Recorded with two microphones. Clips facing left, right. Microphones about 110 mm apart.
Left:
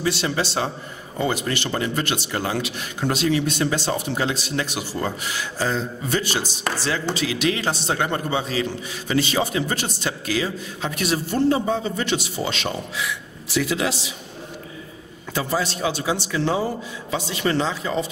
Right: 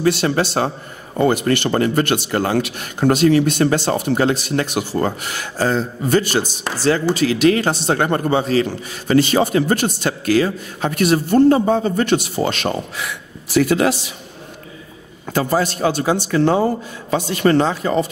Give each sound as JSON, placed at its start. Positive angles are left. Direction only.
{"t": 0.0, "sound": "a man's voice", "side_deg": -50}
{"t": 15.3, "sound": "a man's voice", "side_deg": -50}